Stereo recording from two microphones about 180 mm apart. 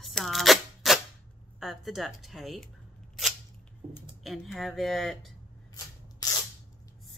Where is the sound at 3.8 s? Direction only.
40° right (ahead or behind).